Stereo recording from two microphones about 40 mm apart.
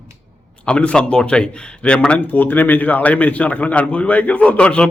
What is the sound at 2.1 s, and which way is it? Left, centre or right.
Speech, left.